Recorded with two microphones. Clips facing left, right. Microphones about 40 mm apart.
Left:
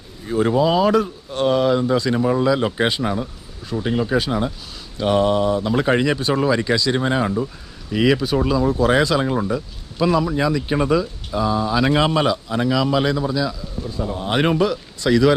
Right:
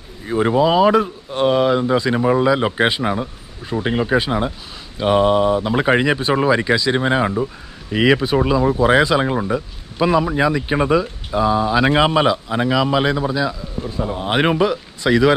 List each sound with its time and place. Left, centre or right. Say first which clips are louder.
0.3 s speech: right 2 dB; right